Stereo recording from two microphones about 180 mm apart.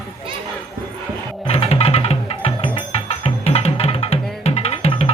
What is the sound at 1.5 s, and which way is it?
Music, 35° left (ahead or behind).